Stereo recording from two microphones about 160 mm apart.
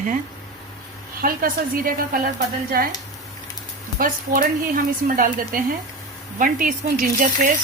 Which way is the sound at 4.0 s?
60° right (ahead or behind).